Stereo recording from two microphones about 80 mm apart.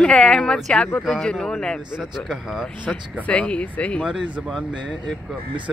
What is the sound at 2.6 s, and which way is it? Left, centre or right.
Speech, centre.